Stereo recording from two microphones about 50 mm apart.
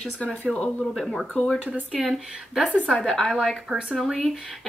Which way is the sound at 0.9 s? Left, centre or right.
Centre.